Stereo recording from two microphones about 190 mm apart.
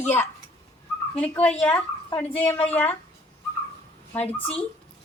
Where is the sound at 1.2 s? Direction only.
5° left (ahead or behind).